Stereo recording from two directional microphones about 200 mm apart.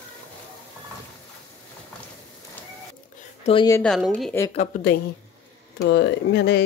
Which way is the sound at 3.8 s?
5° left (ahead or behind).